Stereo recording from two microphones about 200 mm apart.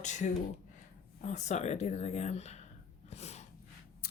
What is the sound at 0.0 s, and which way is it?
Speech, 35° left (ahead or behind).